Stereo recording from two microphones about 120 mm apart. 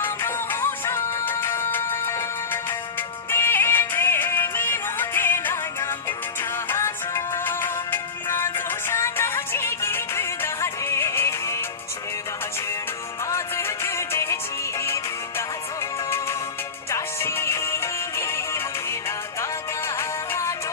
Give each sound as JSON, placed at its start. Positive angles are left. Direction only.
{"t": 0.0, "sound": "music", "side_deg": 20}
{"t": 6.7, "sound": "music", "side_deg": 20}
{"t": 13.3, "sound": "music", "side_deg": 20}
{"t": 16.9, "sound": "music", "side_deg": 20}
{"t": 20.0, "sound": "music", "side_deg": 20}